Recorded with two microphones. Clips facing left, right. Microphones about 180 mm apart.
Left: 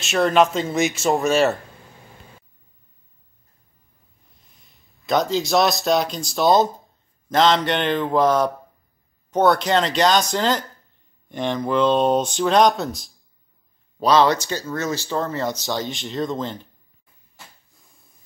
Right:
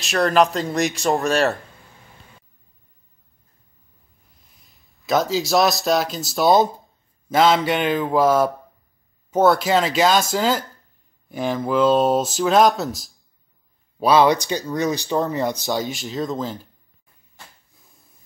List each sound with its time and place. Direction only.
0.0 s speech: centre (ahead or behind)
4.6 s speech: centre (ahead or behind); by 15.9 s 15° right (ahead or behind)
15.9 s speech: centre (ahead or behind)